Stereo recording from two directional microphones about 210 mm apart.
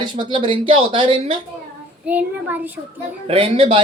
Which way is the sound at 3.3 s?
25° right (ahead or behind).